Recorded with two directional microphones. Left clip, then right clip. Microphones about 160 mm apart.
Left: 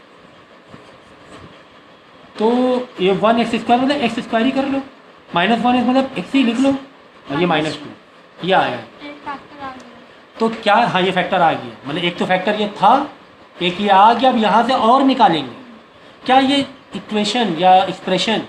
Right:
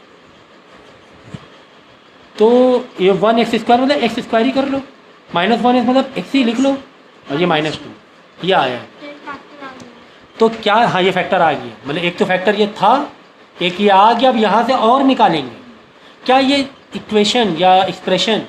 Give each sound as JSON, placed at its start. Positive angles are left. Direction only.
{"t": 2.3, "sound": "a man's voice", "side_deg": -35}
{"t": 10.3, "sound": "a man's voice", "side_deg": -35}